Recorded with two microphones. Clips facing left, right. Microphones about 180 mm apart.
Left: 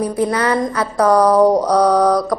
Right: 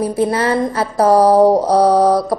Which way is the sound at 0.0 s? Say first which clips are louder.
Right 1 dB; 25° right (ahead or behind).